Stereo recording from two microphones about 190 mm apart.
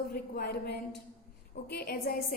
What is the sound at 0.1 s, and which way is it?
A woman's voice, 55° left (ahead or behind).